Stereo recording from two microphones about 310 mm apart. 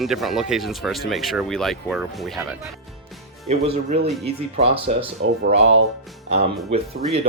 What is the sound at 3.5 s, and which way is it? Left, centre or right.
Speech, right.